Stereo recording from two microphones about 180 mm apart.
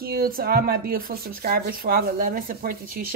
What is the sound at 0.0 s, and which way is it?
Speech, 55° right (ahead or behind).